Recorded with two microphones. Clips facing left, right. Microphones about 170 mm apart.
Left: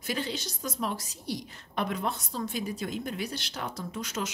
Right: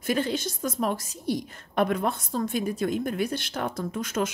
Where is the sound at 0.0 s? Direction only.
50° right (ahead or behind).